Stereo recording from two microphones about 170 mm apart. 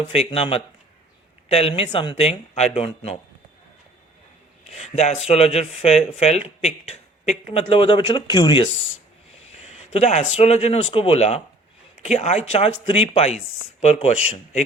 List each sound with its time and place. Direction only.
0.0 s speech: 35° left (ahead or behind)
4.6 s speech: 40° left (ahead or behind)
9.5 s speech: 40° left (ahead or behind)